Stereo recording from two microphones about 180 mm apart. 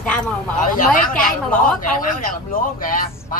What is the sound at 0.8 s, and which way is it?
Speech, 50° left (ahead or behind).